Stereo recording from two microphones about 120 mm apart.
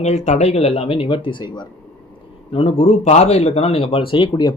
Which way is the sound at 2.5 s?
55° left (ahead or behind).